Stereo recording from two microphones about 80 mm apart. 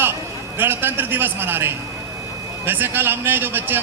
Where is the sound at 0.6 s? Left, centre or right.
Right.